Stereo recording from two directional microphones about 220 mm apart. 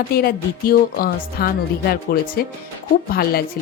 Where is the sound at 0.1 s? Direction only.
45° left (ahead or behind).